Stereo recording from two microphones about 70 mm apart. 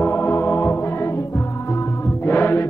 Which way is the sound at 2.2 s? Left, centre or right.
Left.